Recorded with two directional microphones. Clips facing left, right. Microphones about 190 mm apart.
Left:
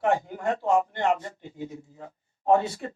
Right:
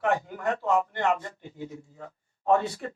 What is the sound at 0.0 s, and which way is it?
A man's voice, 20° left (ahead or behind).